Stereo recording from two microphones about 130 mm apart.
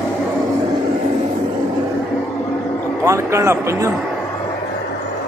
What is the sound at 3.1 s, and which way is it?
Speech, 20° right (ahead or behind).